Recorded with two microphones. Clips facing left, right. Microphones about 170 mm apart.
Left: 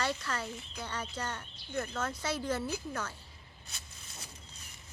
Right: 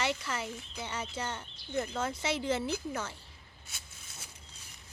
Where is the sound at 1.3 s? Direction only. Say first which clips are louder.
Right 2 dB; 20° right (ahead or behind).